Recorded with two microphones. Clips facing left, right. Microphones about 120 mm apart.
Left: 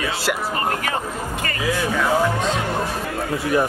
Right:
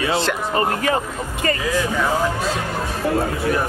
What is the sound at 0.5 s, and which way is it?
Speech, 30° right (ahead or behind).